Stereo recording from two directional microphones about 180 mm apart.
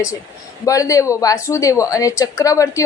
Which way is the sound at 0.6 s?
20° left (ahead or behind).